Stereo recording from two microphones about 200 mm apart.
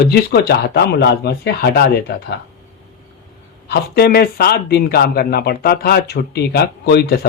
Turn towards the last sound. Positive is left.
turn(degrees=55)  # may be behind; listen again after turning